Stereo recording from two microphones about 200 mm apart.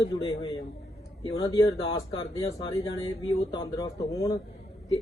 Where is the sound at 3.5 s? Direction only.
20° left (ahead or behind).